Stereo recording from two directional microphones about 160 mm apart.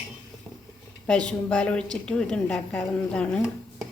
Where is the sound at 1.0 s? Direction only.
5° left (ahead or behind).